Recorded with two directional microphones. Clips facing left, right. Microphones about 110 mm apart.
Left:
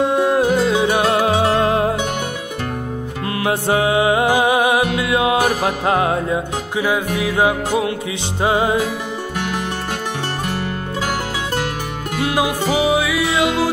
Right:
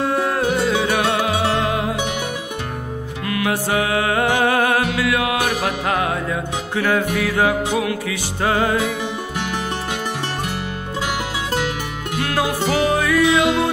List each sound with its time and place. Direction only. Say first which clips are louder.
0.0 s music: left 4 dB; 20° left (ahead or behind)
3.4 s music: left 4 dB; 25° left (ahead or behind)
12.2 s music: left 2 dB; 15° left (ahead or behind)